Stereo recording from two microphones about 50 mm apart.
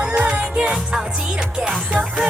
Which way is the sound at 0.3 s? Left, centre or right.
Right.